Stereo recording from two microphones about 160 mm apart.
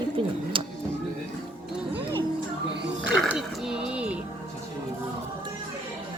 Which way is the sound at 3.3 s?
5° right (ahead or behind).